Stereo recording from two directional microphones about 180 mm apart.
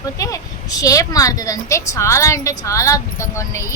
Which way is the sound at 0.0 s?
20° left (ahead or behind).